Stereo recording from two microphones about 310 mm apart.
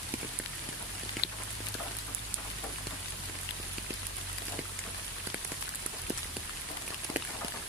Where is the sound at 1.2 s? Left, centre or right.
Left.